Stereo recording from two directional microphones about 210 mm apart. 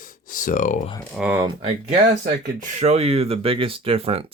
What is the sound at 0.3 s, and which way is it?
Speech, 40° left (ahead or behind).